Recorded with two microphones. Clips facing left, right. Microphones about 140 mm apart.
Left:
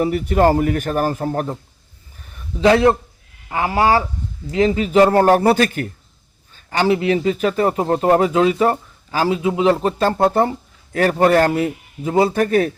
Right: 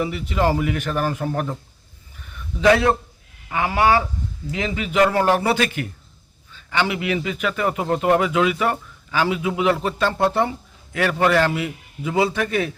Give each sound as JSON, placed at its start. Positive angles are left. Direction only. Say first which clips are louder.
{"t": 0.0, "sound": "speech", "louder": "left 6 dB", "side_deg": 45}
{"t": 2.2, "sound": "a sound", "louder": "left 2 dB", "side_deg": 35}
{"t": 3.5, "sound": "a man's voice", "louder": "left 2 dB", "side_deg": 35}